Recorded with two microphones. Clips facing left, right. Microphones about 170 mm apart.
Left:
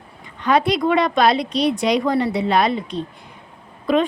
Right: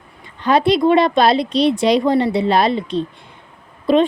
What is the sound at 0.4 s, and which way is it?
A woman's voice, 30° right (ahead or behind).